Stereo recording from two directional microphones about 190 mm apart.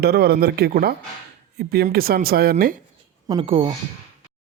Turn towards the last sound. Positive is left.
turn(degrees=-30)  # may be behind; listen again after turning